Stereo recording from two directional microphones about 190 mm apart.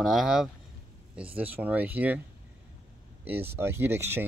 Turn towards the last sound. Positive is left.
turn(degrees=-10)  # may be behind; listen again after turning